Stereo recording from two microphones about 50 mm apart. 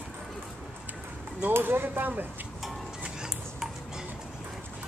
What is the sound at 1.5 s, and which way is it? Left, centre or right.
Speech, right.